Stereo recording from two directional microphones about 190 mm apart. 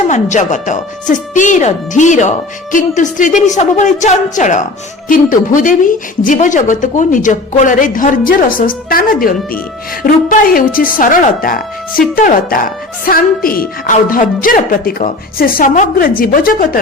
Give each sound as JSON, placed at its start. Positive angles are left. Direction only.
{"t": 0.1, "sound": "speech", "side_deg": 40}